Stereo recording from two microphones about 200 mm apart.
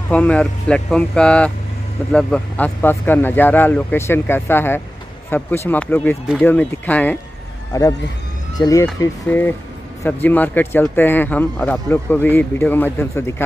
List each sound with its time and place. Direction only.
0.1 s speech: 5° left (ahead or behind)